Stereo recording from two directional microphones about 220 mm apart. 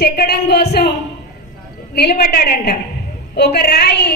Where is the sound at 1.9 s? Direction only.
45° left (ahead or behind).